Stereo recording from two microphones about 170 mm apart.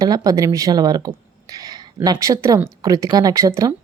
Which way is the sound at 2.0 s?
20° right (ahead or behind).